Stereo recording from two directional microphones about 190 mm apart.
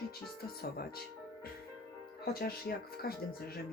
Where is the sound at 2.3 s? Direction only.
50° left (ahead or behind).